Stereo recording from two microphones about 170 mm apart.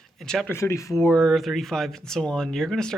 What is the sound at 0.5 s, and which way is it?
Speech, 15° left (ahead or behind).